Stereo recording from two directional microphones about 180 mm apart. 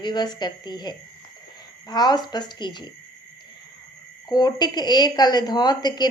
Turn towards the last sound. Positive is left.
turn(degrees=25)  # may be behind; listen again after turning